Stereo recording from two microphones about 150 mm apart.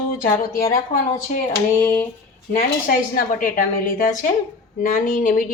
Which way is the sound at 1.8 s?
15° left (ahead or behind).